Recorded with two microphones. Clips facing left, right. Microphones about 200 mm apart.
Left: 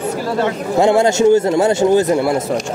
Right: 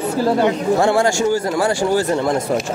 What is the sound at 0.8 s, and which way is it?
Speech, 20° left (ahead or behind).